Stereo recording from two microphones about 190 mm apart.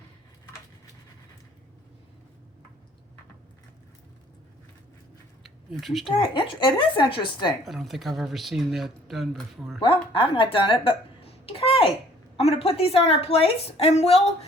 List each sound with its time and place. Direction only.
5.7 s speech: centre (ahead or behind)
6.1 s speech: 25° left (ahead or behind)
7.6 s speech: centre (ahead or behind)
9.8 s a sound: 30° left (ahead or behind)
12.4 s a woman's voice: 30° left (ahead or behind)